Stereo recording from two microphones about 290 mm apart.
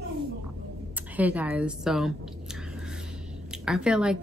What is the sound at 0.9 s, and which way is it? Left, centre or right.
Chewing, centre.